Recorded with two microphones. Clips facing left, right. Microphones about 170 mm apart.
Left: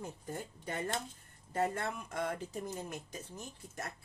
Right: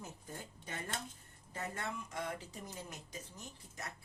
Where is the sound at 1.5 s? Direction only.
55° left (ahead or behind).